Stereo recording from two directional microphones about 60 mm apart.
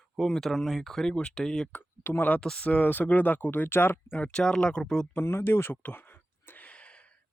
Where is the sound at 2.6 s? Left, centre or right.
Left.